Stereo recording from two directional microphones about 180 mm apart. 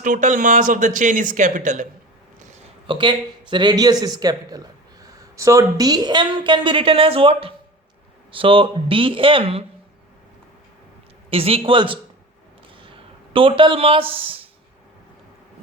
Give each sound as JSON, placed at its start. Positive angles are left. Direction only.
{"t": 0.0, "sound": "speech", "side_deg": -45}
{"t": 2.8, "sound": "speech", "side_deg": -25}
{"t": 11.3, "sound": "speech", "side_deg": -30}